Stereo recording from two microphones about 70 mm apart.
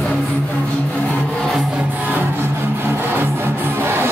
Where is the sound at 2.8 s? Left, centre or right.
Right.